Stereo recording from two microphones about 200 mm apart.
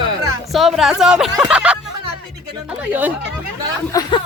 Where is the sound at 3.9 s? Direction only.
15° left (ahead or behind).